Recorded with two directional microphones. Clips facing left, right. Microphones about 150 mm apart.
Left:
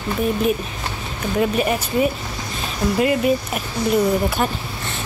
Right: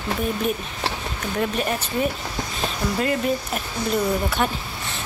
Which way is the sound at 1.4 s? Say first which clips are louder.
Left 5 dB; 10° left (ahead or behind).